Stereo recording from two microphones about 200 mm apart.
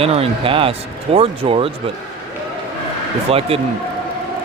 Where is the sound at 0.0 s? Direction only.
30° right (ahead or behind).